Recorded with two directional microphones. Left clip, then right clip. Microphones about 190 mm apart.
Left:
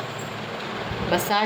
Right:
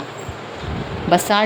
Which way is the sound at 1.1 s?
60° right (ahead or behind).